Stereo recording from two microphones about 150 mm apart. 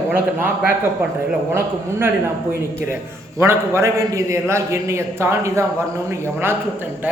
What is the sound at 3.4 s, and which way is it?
A man's voice, 15° right (ahead or behind).